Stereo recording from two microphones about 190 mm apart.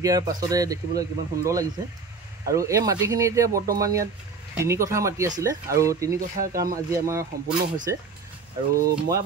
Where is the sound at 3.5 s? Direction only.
50° right (ahead or behind).